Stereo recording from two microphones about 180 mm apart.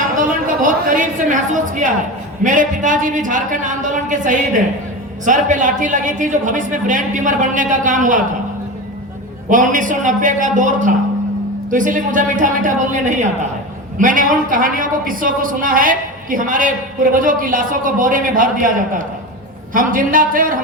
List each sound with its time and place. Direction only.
0.2 s a sound: 45° right (ahead or behind)
2.4 s a woman's voice: 45° right (ahead or behind)
9.5 s a woman's voice: 45° right (ahead or behind)